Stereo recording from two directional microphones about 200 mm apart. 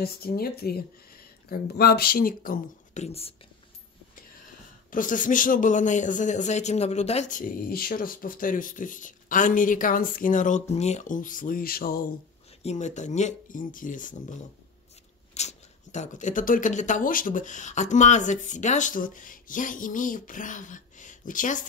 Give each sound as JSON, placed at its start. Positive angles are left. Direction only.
{"t": 0.0, "sound": "speech", "side_deg": 50}
{"t": 4.9, "sound": "speech", "side_deg": 40}
{"t": 15.3, "sound": "speech", "side_deg": 35}